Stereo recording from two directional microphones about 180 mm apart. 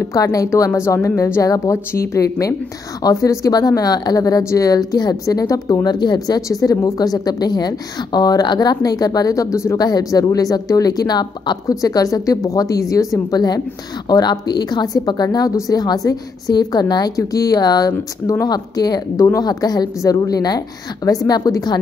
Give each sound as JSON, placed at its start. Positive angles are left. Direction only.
{"t": 0.0, "sound": "a woman's voice", "side_deg": 20}